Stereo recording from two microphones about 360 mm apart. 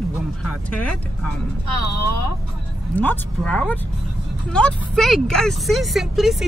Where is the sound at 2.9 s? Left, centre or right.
Centre.